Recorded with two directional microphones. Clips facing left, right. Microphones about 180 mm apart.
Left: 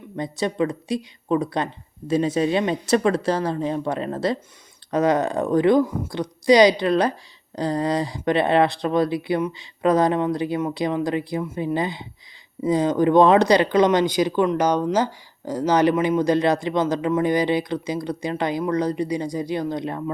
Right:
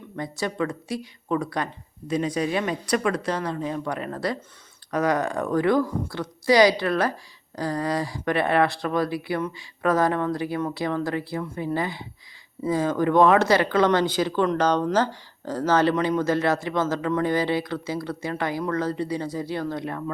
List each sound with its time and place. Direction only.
0.2 s speech: 20° left (ahead or behind)